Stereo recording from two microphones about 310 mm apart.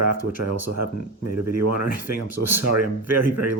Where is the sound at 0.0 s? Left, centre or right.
Right.